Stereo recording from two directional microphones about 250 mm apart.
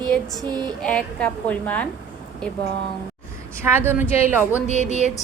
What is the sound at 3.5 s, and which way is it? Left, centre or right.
Speech, centre.